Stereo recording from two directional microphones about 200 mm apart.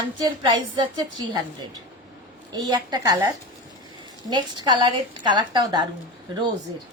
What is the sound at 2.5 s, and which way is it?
Speech, 20° right (ahead or behind).